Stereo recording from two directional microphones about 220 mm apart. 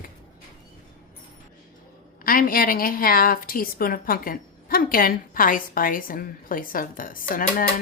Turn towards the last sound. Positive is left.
turn(degrees=35)  # may be behind; listen again after turning